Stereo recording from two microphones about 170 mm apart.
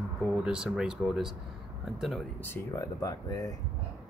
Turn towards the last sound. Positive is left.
turn(degrees=20)  # may be behind; listen again after turning